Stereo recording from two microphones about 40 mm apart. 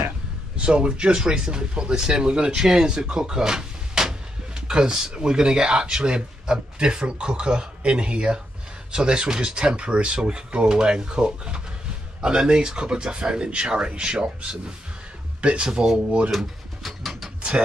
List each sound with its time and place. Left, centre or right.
0.6 s speech: right
16.3 s pigeon: centre